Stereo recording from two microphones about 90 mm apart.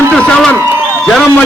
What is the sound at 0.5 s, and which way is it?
Speech, 25° right (ahead or behind).